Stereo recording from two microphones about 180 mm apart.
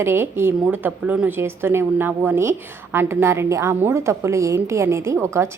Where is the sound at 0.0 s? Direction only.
15° right (ahead or behind).